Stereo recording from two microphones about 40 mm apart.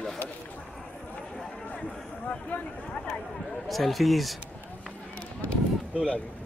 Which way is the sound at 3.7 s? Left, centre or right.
Centre.